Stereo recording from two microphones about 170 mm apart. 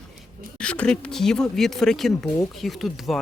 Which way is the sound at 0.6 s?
5° left (ahead or behind).